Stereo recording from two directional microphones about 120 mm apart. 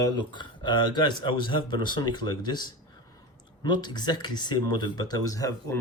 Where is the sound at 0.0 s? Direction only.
40° left (ahead or behind).